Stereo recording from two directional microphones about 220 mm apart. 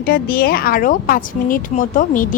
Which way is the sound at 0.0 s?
40° left (ahead or behind).